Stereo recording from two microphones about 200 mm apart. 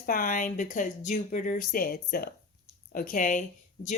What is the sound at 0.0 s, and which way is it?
Speech, 45° left (ahead or behind).